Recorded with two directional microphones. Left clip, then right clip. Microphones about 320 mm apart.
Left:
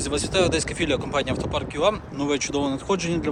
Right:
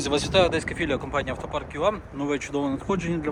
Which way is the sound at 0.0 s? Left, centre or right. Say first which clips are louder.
Right 1 dB; centre.